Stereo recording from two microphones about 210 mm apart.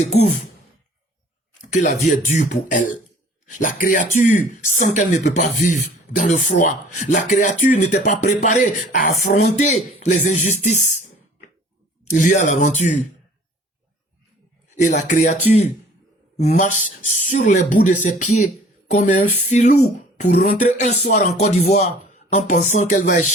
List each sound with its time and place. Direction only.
1.7 s speech: 35° left (ahead or behind)
12.0 s speech: 35° left (ahead or behind)
14.8 s speech: 35° left (ahead or behind)
16.4 s speech: 35° left (ahead or behind)
21.0 s music: 50° left (ahead or behind)
21.3 s speech: 30° left (ahead or behind)